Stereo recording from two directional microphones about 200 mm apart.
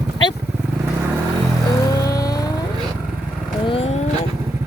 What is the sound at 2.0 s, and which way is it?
Vehicle, 20° left (ahead or behind).